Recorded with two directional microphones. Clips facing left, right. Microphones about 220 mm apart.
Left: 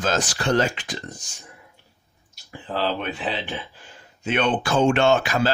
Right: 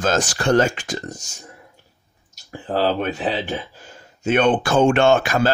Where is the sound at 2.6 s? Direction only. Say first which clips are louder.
Right 5 dB; 45° right (ahead or behind).